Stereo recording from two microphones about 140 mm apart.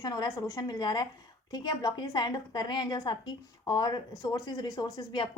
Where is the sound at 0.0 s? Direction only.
25° left (ahead or behind).